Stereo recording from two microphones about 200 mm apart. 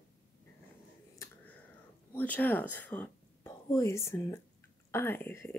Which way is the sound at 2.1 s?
10° left (ahead or behind).